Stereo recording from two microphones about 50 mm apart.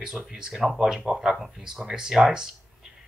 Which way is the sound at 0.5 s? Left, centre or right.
Centre.